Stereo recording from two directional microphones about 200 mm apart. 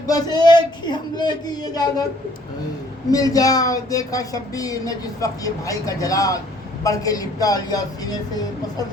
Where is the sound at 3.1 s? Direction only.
20° left (ahead or behind).